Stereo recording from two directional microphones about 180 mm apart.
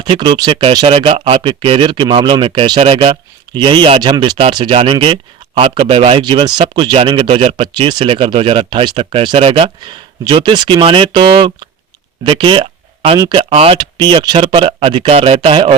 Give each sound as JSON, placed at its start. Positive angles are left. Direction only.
{"t": 0.0, "sound": "speech", "side_deg": -25}
{"t": 12.2, "sound": "a sound", "side_deg": -30}
{"t": 13.1, "sound": "speech", "side_deg": -25}